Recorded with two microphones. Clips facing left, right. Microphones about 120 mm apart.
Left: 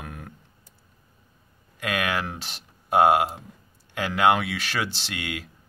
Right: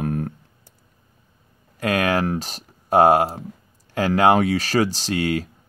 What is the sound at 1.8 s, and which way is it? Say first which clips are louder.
Speech: right 7 dB; 40° right (ahead or behind).